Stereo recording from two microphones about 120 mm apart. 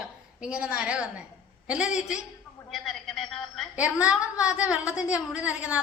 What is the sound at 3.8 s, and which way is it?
A woman's voice, 10° right (ahead or behind).